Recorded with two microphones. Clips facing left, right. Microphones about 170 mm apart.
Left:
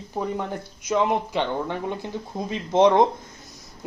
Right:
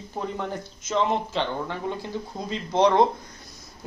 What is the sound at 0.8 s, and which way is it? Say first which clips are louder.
Speech: left 2 dB; 10° left (ahead or behind).